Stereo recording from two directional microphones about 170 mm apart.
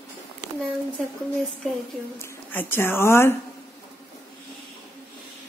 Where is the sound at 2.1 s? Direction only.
15° left (ahead or behind).